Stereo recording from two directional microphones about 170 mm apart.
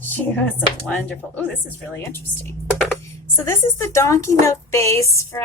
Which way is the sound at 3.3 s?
15° left (ahead or behind).